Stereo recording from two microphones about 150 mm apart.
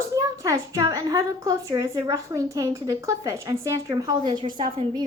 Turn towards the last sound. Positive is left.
turn(degrees=-30)  # may be behind; listen again after turning